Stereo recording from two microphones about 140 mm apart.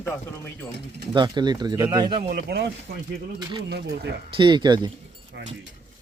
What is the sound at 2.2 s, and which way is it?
Speech, 90° right.